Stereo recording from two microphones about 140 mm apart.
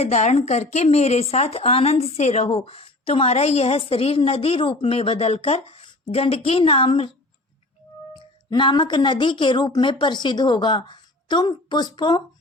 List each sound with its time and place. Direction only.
0.0 s speech: 55° left (ahead or behind)
8.1 s a woman's voice: 35° left (ahead or behind)